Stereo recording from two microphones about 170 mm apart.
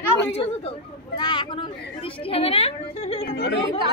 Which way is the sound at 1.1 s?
30° left (ahead or behind).